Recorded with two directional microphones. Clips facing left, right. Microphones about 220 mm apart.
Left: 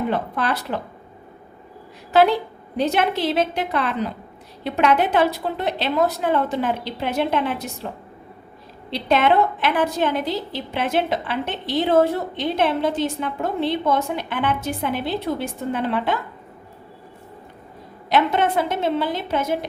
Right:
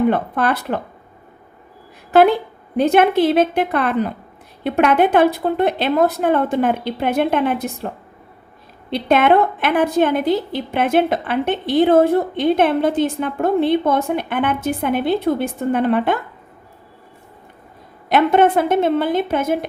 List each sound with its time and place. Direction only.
0.1 s a woman's voice: 55° right (ahead or behind)
2.1 s a woman's voice: 55° right (ahead or behind)
8.9 s a woman's voice: 55° right (ahead or behind)
18.1 s a woman's voice: 55° right (ahead or behind)